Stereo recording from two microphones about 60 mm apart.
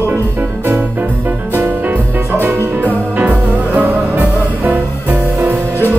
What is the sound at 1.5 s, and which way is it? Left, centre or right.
Music, right.